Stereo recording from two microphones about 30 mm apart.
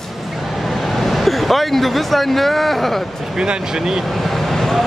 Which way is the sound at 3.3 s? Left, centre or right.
Right.